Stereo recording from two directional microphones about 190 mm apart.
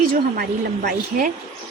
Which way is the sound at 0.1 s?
50° right (ahead or behind).